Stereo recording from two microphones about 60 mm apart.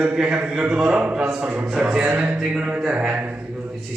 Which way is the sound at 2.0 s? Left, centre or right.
Right.